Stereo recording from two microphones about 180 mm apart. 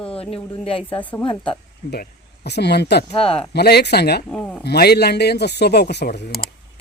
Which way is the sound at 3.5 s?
65° left (ahead or behind).